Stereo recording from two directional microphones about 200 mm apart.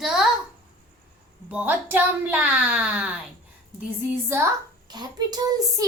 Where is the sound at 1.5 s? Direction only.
10° right (ahead or behind).